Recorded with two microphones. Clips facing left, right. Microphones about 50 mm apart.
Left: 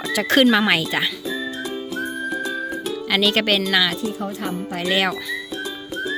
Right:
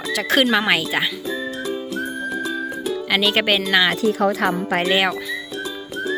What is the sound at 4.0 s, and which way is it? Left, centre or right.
Speech, right.